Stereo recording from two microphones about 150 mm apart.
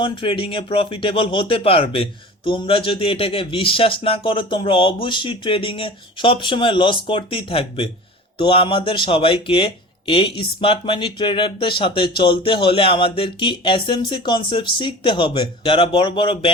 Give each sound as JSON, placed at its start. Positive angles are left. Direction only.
{"t": 0.0, "sound": "speech", "side_deg": 35}